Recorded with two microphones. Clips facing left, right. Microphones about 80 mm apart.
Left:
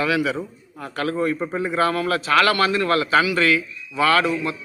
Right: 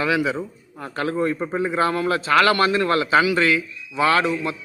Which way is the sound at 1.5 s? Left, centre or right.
Right.